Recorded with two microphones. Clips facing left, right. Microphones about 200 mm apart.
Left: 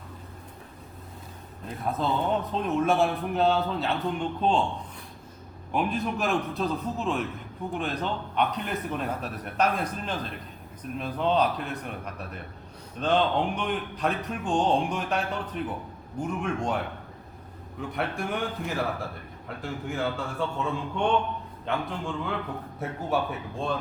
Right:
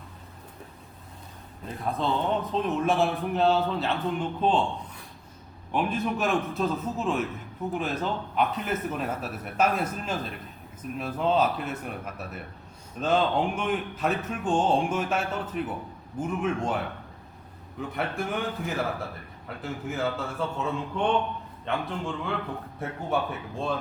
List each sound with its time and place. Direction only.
1.6 s a man's voice: centre (ahead or behind)
5.7 s a man's voice: centre (ahead or behind)